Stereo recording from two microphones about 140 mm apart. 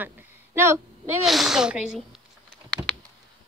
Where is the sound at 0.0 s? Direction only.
15° right (ahead or behind).